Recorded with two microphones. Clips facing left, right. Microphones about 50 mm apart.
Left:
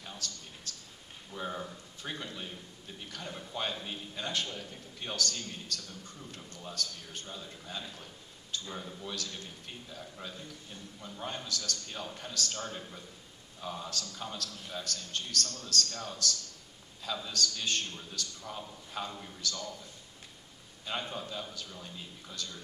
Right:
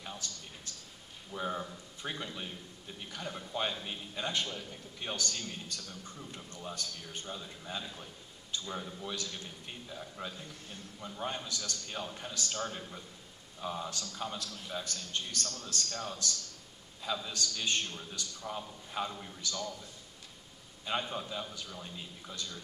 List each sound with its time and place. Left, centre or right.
0.7 s a sound: right
1.3 s a man's voice: centre
4.2 s a man's voice: right
7.2 s a man's voice: centre
11.4 s a man's voice: right
11.9 s a man's voice: centre
12.4 s a man's voice: right
13.6 s a man's voice: centre
13.8 s a man's voice: right
17.0 s a man's voice: centre
17.3 s a man's voice: right
19.4 s a man's voice: right
20.8 s a man's voice: centre